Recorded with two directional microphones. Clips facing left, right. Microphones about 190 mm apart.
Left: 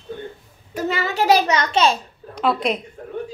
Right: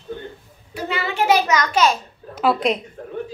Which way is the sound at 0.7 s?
40° left (ahead or behind).